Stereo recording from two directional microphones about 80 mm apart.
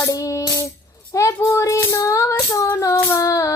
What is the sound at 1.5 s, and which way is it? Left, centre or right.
Music, left.